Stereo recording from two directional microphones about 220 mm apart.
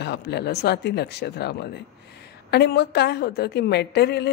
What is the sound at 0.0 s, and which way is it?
A woman's voice, 50° left (ahead or behind).